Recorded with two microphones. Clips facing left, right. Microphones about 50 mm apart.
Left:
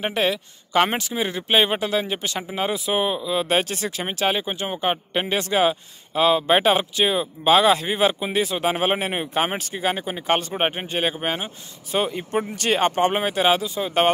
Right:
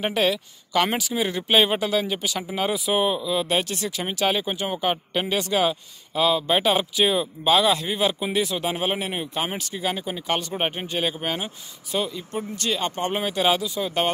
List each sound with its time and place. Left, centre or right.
0.0 s speech: centre
2.7 s speech: centre
6.1 s speech: left
7.1 s speech: centre
7.5 s speech: left
8.6 s speech: left
12.0 s speech: left; by 13.9 s centre